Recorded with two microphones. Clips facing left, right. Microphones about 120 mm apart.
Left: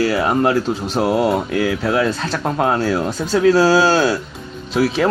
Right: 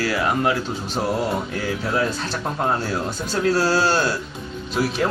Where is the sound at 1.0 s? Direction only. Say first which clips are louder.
Left 6 dB; 75° left (ahead or behind); by 5.0 s 90° left.